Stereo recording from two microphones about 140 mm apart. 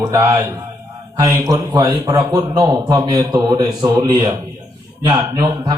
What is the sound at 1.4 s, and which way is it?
A man's voice, 30° right (ahead or behind).